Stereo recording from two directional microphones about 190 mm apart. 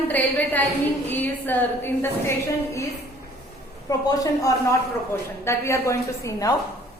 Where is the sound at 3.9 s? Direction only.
20° left (ahead or behind).